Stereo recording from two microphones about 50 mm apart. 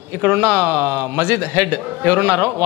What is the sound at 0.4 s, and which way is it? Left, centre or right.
A man's voice, right.